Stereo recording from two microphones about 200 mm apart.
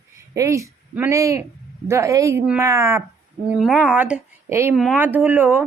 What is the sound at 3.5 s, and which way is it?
Speech, 5° right (ahead or behind).